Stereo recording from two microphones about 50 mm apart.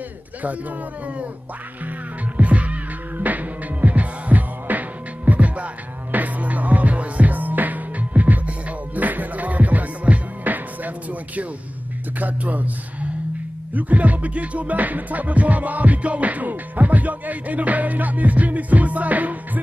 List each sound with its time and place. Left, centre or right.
2.3 s music: right
12.2 s speech: right
13.7 s music: right